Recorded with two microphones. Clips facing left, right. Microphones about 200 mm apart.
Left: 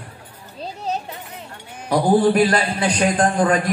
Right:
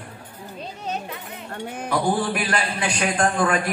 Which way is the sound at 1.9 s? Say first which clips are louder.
Left 8 dB; 40° left (ahead or behind).